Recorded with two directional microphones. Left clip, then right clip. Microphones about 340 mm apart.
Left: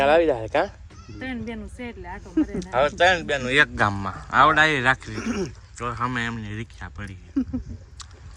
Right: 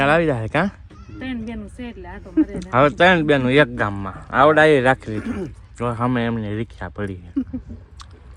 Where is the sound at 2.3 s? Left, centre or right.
Left.